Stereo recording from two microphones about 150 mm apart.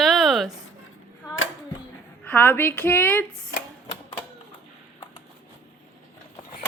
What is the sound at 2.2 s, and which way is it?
Speech, 10° left (ahead or behind).